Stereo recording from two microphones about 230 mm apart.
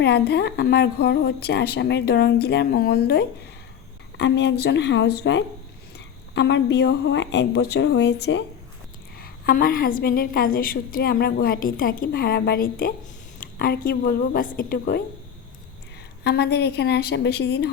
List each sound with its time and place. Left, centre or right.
0.0 s a woman's voice: left
16.2 s a woman's voice: left